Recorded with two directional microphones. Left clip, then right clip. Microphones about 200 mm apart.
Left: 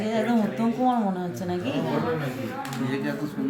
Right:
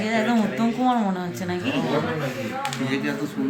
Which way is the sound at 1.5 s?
5° right (ahead or behind).